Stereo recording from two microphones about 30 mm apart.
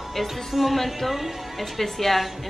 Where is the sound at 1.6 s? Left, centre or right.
Centre.